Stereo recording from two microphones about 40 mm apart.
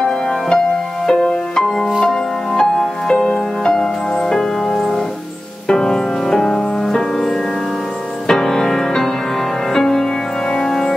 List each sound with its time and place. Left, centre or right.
1.1 s music: left
4.7 s organ: centre
5.7 s music: centre